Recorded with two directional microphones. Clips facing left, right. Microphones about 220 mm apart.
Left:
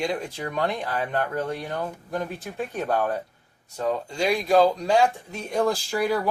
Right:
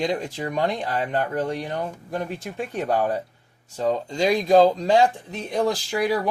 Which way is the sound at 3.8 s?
35° right (ahead or behind).